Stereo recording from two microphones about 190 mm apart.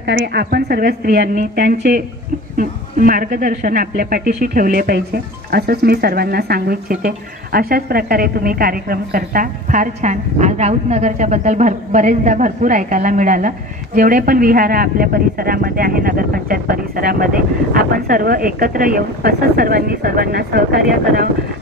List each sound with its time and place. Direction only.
0.0 s a woman's voice: 60° right (ahead or behind)